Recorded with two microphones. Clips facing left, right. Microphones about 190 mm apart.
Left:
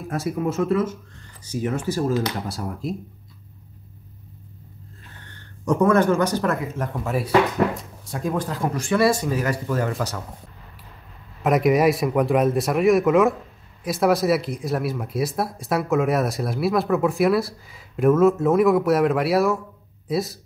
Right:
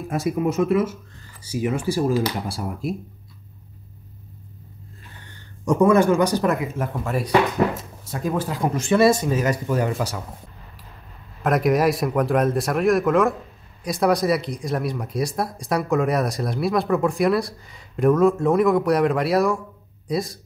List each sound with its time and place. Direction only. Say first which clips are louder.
0.1 s speech: right 2 dB; 15° right (ahead or behind)
5.7 s speech: right 2 dB; 10° right (ahead or behind)
6.9 s speech: even; centre (ahead or behind)
8.5 s speech: right 4 dB; 20° right (ahead or behind)
11.4 s speech: left 1 dB; centre (ahead or behind)